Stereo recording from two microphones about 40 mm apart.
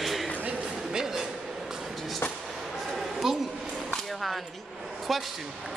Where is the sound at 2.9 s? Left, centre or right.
Centre.